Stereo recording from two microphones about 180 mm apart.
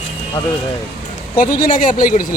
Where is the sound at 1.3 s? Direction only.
50° left (ahead or behind).